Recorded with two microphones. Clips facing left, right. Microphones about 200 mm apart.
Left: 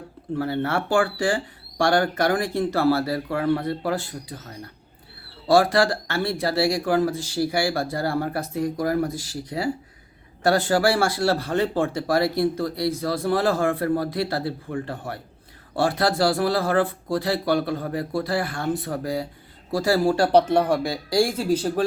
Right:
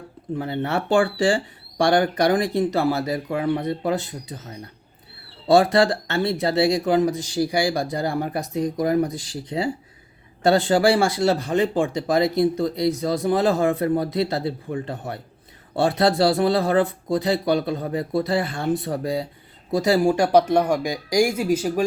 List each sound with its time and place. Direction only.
0.3 s speech: 20° right (ahead or behind)